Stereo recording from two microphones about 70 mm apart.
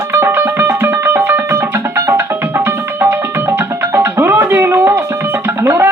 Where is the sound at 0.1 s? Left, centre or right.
Right.